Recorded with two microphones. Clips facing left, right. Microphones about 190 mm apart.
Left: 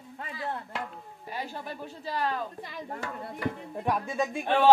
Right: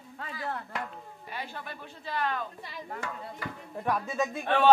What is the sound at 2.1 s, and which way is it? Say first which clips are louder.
Speech: left 1 dB; 35° left (ahead or behind).